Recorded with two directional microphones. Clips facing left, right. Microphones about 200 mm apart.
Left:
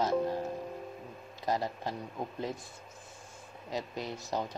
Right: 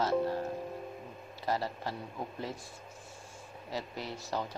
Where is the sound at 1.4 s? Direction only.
15° left (ahead or behind).